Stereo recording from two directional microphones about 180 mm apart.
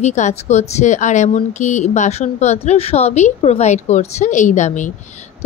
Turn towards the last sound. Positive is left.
turn(degrees=40)  # may be behind; listen again after turning